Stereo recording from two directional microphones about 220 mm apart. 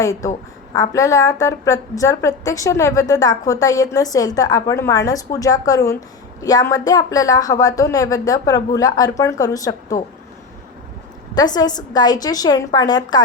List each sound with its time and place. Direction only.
0.0 s a woman's voice: 15° left (ahead or behind)
11.3 s a woman's voice: 20° left (ahead or behind)